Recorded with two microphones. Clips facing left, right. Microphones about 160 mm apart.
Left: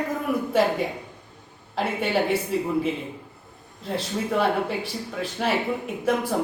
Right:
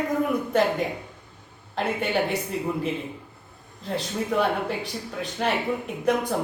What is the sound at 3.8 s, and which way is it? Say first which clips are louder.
Speech: left 1 dB; centre (ahead or behind).